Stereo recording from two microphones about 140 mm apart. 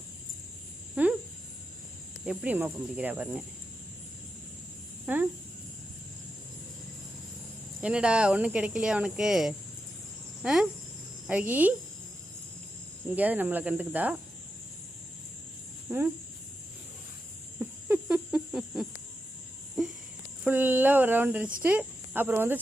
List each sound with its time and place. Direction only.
1.0 s a sound: 10° right (ahead or behind)
2.2 s speech: 5° right (ahead or behind)
5.0 s speech: 10° right (ahead or behind)
7.8 s speech: 5° right (ahead or behind)
13.1 s speech: 10° right (ahead or behind)
15.9 s speech: 15° right (ahead or behind)
17.6 s a sound: 10° right (ahead or behind)
20.4 s speech: 15° right (ahead or behind)